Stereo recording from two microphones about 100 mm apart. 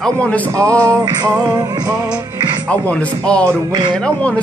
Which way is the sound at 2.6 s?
10° left (ahead or behind).